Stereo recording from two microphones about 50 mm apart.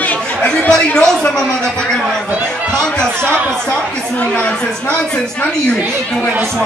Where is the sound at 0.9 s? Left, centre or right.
Centre.